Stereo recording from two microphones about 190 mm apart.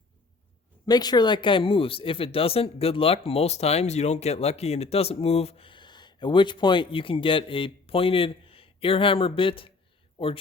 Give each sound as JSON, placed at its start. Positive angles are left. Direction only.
{"t": 0.9, "sound": "speech", "side_deg": 20}